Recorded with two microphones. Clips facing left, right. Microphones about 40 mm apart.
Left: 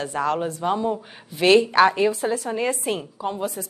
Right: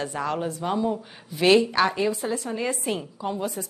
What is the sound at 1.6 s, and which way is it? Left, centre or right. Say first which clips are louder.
A woman's voice: left 5 dB; centre.